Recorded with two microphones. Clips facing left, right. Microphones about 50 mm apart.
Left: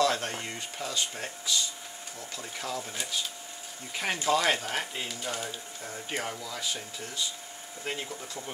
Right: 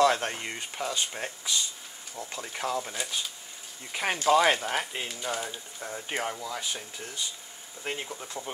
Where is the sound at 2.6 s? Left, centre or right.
Right.